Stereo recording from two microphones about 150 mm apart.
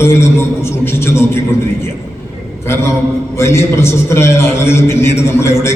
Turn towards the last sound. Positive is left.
turn(degrees=15)  # may be behind; listen again after turning